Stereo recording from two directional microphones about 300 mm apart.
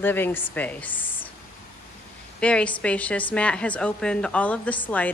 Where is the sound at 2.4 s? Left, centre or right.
Centre.